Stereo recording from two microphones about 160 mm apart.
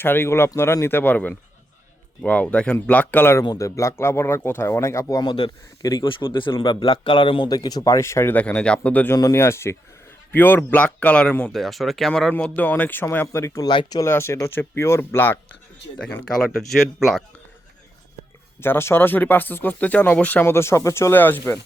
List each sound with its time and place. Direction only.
0.0 s speech: 15° left (ahead or behind)
13.7 s speech: 30° left (ahead or behind)
14.0 s speech: 15° left (ahead or behind); by 17.2 s centre (ahead or behind)
18.6 s speech: 15° left (ahead or behind)